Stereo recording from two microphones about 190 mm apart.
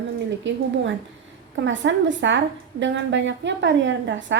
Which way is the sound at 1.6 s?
70° right (ahead or behind).